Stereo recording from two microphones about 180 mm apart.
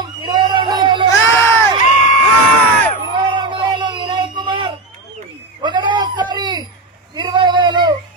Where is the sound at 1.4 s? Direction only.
10° left (ahead or behind).